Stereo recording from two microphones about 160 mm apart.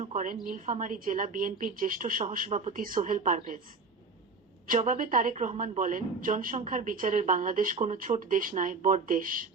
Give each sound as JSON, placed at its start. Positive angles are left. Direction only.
{"t": 0.0, "sound": "a sound", "side_deg": -45}
{"t": 0.4, "sound": "a woman's voice", "side_deg": -55}
{"t": 2.7, "sound": "a woman's voice", "side_deg": -60}
{"t": 4.7, "sound": "a woman's voice", "side_deg": -55}